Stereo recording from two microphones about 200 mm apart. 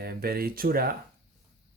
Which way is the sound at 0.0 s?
50° right (ahead or behind).